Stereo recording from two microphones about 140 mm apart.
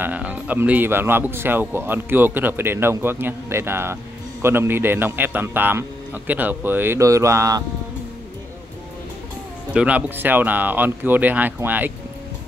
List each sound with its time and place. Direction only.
0.0 s speech: 10° right (ahead or behind)
9.8 s speech: 10° right (ahead or behind)